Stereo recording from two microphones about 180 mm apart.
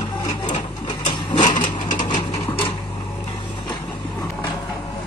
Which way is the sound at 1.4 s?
45° left (ahead or behind).